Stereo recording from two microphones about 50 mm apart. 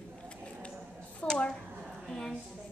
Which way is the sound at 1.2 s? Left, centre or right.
Left.